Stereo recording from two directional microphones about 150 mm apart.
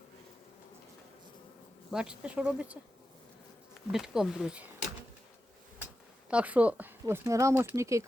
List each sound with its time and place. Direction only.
1.9 s speech: 5° right (ahead or behind)
3.9 s speech: 5° right (ahead or behind)
6.3 s speech: 10° right (ahead or behind)
7.0 s speech: 20° right (ahead or behind)